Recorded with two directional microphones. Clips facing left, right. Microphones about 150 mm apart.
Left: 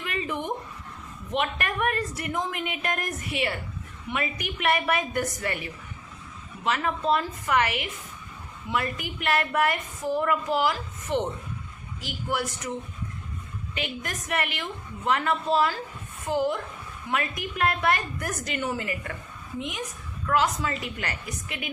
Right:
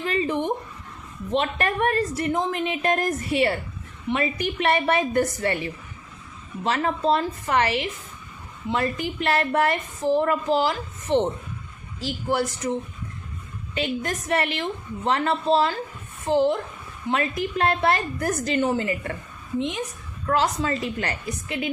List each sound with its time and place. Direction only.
0.0 s a sound: 30° right (ahead or behind)
1.3 s a woman's voice: 30° right (ahead or behind)
13.7 s a woman's voice: 30° right (ahead or behind)